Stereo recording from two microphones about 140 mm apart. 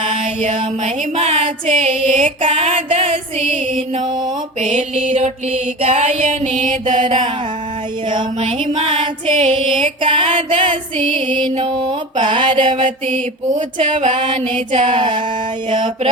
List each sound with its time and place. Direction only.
0.0 s mantra: 50° right (ahead or behind)
1.1 s a sound: 45° right (ahead or behind)
4.6 s music: 60° right (ahead or behind)
7.0 s music: 35° right (ahead or behind)
13.7 s music: 35° right (ahead or behind)